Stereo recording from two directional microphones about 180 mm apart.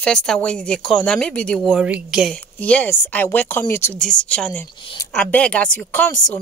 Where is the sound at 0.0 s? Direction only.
5° left (ahead or behind).